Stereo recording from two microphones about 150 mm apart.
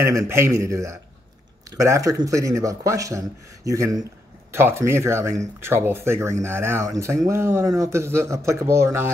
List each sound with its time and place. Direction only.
0.0 s speech: 20° right (ahead or behind)